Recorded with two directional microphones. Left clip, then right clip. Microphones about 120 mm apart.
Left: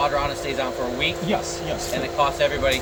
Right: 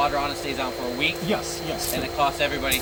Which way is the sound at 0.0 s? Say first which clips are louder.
Left 1 dB; 35° left (ahead or behind).